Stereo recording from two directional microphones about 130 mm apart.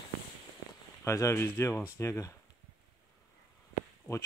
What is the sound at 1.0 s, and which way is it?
Speech, 20° left (ahead or behind).